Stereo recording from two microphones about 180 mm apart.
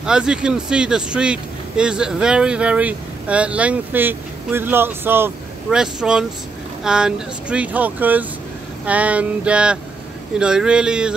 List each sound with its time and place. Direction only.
0.0 s speech: 5° right (ahead or behind)